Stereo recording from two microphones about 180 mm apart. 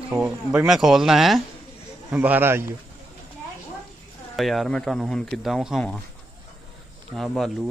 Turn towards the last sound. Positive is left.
turn(degrees=0)  # may be behind; listen again after turning